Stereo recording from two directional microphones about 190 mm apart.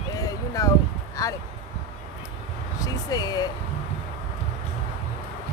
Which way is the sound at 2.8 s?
20° left (ahead or behind).